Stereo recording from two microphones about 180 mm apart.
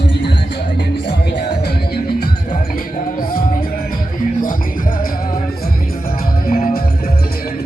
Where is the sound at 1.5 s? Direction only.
60° left (ahead or behind).